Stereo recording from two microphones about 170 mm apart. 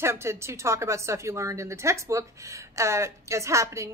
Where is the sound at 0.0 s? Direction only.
15° right (ahead or behind).